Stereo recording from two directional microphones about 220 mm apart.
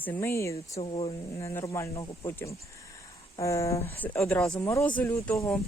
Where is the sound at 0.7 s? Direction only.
25° left (ahead or behind).